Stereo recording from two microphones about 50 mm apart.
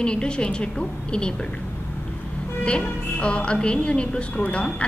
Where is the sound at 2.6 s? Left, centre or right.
Left.